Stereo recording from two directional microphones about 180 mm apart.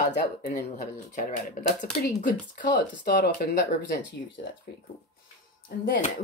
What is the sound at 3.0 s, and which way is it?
Speech, 60° left (ahead or behind).